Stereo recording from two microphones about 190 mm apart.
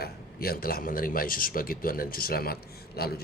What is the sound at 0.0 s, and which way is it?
Speech, 50° left (ahead or behind).